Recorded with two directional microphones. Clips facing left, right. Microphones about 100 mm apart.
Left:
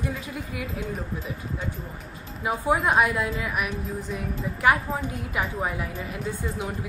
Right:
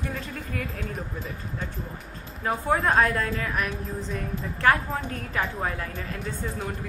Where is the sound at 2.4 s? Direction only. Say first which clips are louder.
Left 1 dB; 10° left (ahead or behind).